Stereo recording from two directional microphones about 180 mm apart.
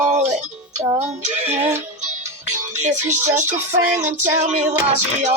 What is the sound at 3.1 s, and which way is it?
Music, 15° right (ahead or behind).